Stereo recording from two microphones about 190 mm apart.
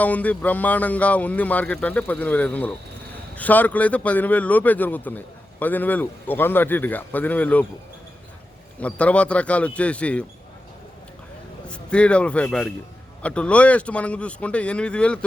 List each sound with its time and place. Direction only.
0.0 s speech: 10° left (ahead or behind)
8.8 s speech: 5° left (ahead or behind)
11.7 s a man's voice: 5° left (ahead or behind)